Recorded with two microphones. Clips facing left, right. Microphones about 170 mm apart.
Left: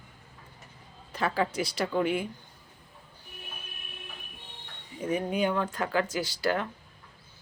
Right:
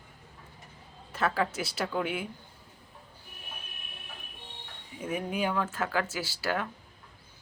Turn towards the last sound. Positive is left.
turn(degrees=-5)  # may be behind; listen again after turning